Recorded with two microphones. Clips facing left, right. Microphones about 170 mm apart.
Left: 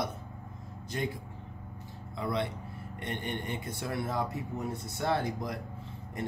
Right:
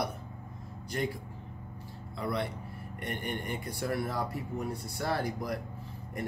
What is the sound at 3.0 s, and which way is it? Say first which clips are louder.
A man's voice: even; 25° left (ahead or behind).